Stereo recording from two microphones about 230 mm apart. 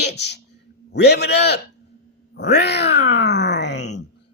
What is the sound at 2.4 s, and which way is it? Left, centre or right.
Groan, left.